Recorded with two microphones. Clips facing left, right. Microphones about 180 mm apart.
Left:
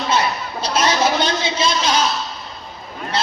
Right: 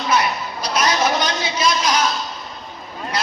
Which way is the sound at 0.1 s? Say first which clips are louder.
Right 1 dB; 25° left (ahead or behind).